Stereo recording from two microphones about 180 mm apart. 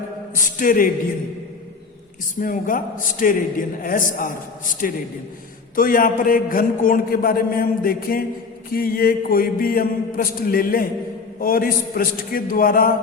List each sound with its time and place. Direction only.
0.4 s a man's voice: 50° left (ahead or behind)
2.4 s a man's voice: 50° left (ahead or behind)